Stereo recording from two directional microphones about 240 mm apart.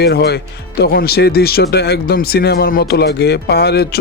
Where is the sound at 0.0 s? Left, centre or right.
Left.